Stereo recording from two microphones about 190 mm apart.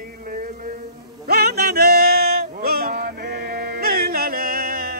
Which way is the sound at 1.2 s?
55° right (ahead or behind).